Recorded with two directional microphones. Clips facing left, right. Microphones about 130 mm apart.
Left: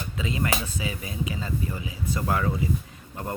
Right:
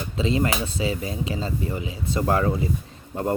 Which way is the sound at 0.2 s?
30° right (ahead or behind).